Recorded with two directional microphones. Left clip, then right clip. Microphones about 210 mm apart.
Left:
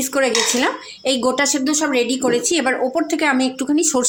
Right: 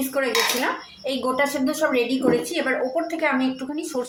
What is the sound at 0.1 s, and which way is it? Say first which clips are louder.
A woman's voice: left 5 dB; 55° left (ahead or behind).